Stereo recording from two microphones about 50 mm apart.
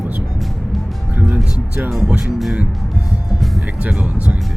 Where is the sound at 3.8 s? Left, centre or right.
Right.